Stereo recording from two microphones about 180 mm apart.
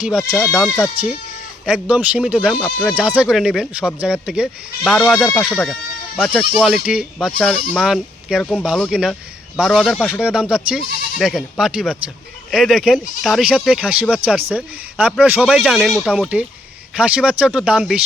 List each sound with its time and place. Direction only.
0.3 s speech: 15° left (ahead or behind)
0.5 s speech: centre (ahead or behind)
6.6 s speech: 5° right (ahead or behind)